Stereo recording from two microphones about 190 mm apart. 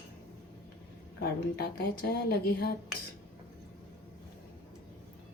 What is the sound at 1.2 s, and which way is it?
Speech, 55° left (ahead or behind).